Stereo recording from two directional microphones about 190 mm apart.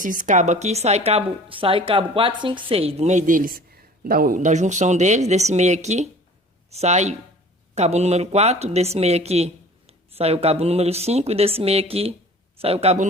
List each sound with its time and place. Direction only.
0.0 s speech: 45° right (ahead or behind)